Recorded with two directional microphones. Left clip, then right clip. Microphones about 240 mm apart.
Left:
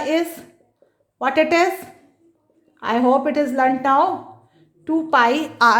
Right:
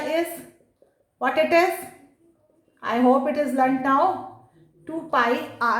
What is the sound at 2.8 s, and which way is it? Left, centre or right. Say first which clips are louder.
A woman's voice: left 3 dB; left.